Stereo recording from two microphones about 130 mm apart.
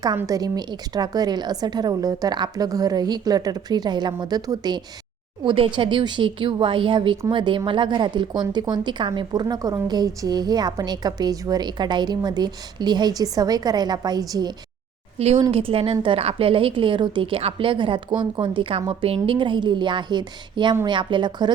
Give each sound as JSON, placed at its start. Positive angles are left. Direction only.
{"t": 0.3, "sound": "speech", "side_deg": -30}
{"t": 15.4, "sound": "speech", "side_deg": -45}